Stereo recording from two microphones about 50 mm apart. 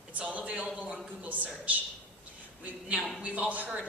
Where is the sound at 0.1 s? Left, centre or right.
Right.